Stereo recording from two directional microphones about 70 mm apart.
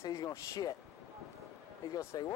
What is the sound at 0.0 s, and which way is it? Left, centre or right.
Speech, left.